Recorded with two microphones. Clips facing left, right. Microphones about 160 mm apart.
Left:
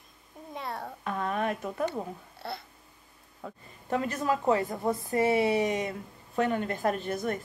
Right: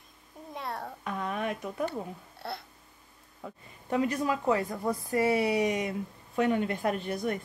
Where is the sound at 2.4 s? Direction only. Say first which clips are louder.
Even; centre (ahead or behind).